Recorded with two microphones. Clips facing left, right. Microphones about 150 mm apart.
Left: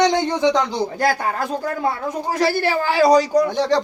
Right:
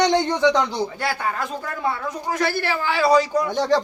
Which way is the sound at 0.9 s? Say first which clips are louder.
Left 5 dB; 40° left (ahead or behind).